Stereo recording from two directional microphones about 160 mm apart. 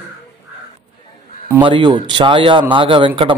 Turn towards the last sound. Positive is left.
turn(degrees=-30)  # may be behind; listen again after turning